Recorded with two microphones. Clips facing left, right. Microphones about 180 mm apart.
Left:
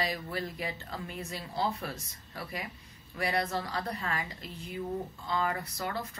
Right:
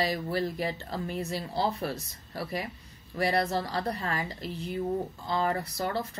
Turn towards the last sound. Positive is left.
turn(degrees=-35)  # may be behind; listen again after turning